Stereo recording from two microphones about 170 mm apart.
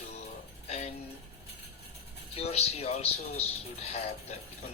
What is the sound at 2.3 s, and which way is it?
Speech, 35° left (ahead or behind).